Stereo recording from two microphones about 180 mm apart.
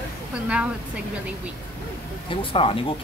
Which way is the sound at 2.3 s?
30° left (ahead or behind).